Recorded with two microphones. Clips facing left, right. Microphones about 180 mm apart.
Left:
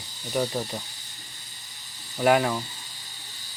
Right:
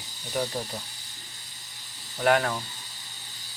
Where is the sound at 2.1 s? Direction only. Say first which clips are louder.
Left 2 dB; 10° left (ahead or behind).